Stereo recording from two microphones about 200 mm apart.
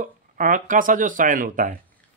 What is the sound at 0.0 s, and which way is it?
Speech, 40° right (ahead or behind).